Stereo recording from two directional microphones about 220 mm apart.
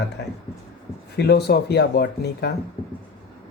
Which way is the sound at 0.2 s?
50° left (ahead or behind).